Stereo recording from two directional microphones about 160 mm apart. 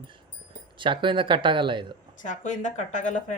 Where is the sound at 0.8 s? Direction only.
30° right (ahead or behind).